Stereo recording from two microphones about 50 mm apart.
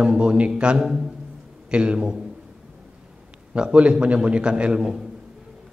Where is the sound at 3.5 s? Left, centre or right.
Right.